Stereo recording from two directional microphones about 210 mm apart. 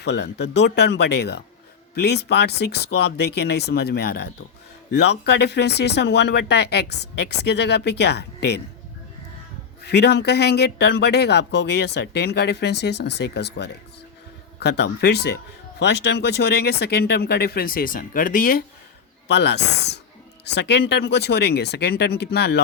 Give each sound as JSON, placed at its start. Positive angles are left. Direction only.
{"t": 0.0, "sound": "speech", "side_deg": 55}
{"t": 9.8, "sound": "speech", "side_deg": 50}
{"t": 19.3, "sound": "speech", "side_deg": 55}